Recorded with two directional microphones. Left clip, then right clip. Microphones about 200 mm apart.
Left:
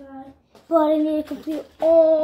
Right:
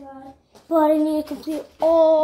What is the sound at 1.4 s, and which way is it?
Child singing, centre (ahead or behind).